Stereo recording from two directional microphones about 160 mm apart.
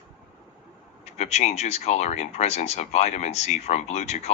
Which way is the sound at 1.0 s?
45° left (ahead or behind).